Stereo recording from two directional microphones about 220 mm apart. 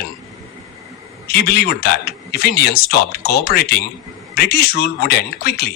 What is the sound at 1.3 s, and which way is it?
Speech, 45° left (ahead or behind).